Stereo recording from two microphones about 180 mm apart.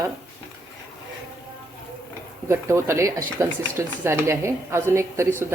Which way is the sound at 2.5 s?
15° right (ahead or behind).